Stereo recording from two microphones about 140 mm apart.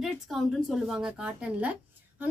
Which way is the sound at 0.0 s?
Centre (ahead or behind).